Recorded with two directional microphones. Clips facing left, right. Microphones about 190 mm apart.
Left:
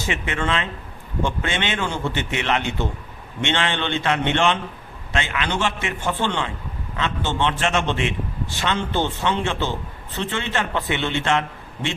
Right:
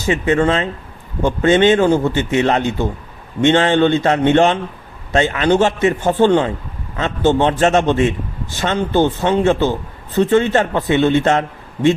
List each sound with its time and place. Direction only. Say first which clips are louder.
0.1 s a man's voice: right 10 dB; 40° right (ahead or behind)